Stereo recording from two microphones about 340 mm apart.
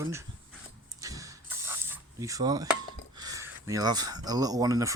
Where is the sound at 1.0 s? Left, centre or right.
Centre.